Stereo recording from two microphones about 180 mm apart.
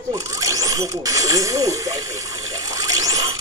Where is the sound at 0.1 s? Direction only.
20° right (ahead or behind).